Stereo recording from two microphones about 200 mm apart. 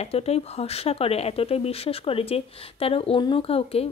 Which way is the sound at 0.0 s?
30° left (ahead or behind).